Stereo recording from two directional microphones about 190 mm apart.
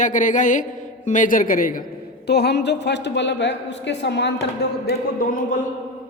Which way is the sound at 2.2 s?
60° left (ahead or behind).